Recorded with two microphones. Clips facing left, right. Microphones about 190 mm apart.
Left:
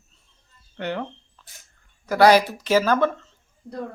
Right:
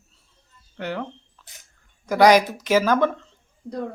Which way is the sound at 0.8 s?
Centre (ahead or behind).